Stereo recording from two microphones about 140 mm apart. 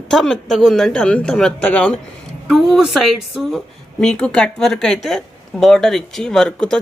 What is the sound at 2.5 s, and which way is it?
Speech, centre (ahead or behind).